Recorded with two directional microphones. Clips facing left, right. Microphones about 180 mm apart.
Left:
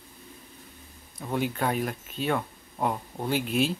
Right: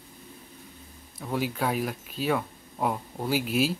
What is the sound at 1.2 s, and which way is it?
Speech, centre (ahead or behind).